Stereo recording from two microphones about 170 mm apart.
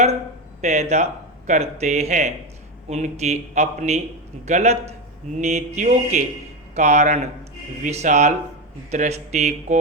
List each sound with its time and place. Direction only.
0.6 s a man's voice: 40° right (ahead or behind)